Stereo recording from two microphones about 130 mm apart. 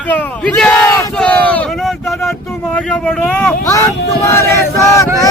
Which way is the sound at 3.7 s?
25° left (ahead or behind).